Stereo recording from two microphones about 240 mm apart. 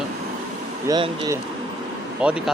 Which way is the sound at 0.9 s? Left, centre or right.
Centre.